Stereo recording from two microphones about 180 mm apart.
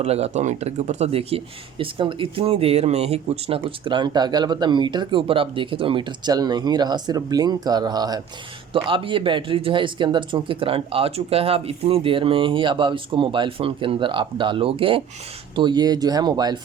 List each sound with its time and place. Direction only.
0.0 s speech: 35° right (ahead or behind)